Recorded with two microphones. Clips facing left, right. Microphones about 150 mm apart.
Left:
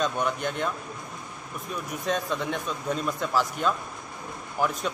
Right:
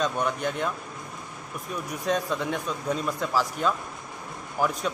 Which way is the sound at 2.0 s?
5° right (ahead or behind).